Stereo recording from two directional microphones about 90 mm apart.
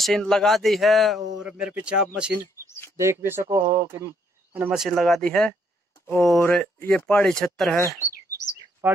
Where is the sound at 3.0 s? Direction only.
30° right (ahead or behind).